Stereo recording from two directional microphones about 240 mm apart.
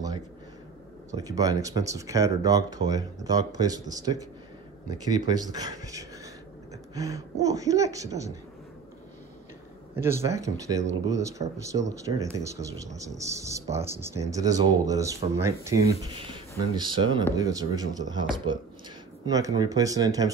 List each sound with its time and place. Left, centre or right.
1.1 s speech: centre
10.0 s speech: centre